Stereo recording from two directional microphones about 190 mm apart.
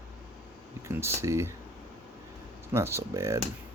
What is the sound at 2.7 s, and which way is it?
Speech, 15° right (ahead or behind).